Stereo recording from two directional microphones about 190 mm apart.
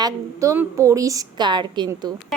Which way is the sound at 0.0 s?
15° right (ahead or behind).